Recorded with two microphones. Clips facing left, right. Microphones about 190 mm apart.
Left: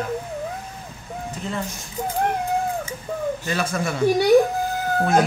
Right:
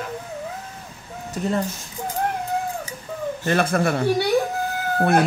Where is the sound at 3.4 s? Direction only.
55° right (ahead or behind).